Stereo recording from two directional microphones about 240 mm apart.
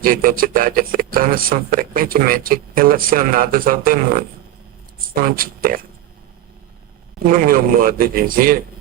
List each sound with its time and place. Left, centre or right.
0.0 s speech: right
7.2 s speech: right